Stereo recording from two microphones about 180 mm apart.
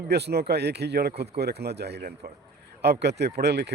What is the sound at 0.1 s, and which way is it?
Speech, 65° right (ahead or behind).